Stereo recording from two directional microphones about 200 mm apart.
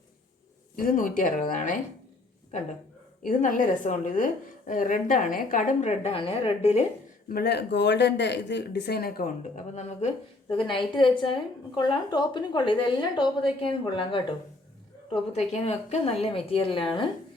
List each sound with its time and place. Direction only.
0.8 s speech: 45° left (ahead or behind)
3.2 s a woman's voice: 40° left (ahead or behind)
7.3 s speech: 50° left (ahead or behind); by 10.1 s 35° left (ahead or behind)
10.7 s a woman's voice: 25° left (ahead or behind)